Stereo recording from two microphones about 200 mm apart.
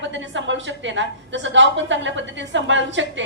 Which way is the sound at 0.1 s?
70° right (ahead or behind).